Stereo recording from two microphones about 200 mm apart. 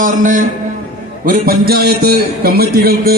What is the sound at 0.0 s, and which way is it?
A man's voice, 40° right (ahead or behind).